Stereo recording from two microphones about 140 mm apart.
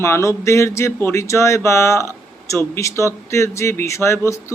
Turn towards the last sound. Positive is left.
turn(degrees=20)  # may be behind; listen again after turning